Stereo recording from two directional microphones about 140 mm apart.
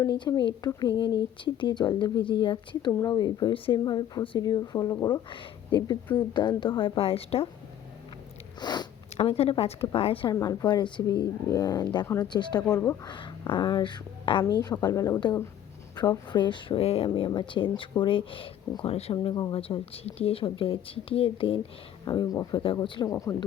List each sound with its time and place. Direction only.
0.0 s speech: 30° left (ahead or behind)
8.6 s speech: 30° left (ahead or behind)
9.1 s speech: 45° left (ahead or behind)
10.3 s speech: 25° left (ahead or behind)
12.0 s speech: 20° left (ahead or behind)
12.3 s speech: 30° left (ahead or behind)
19.1 s speech: 35° left (ahead or behind)
22.0 s speech: 30° left (ahead or behind)